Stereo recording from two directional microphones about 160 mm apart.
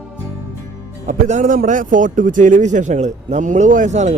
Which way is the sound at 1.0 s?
55° right (ahead or behind).